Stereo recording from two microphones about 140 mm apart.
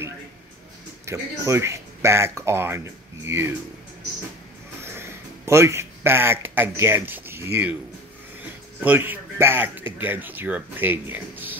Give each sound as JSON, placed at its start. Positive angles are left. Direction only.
{"t": 1.0, "sound": "speech", "side_deg": -20}
{"t": 4.8, "sound": "speech", "side_deg": -20}
{"t": 8.8, "sound": "speech", "side_deg": -15}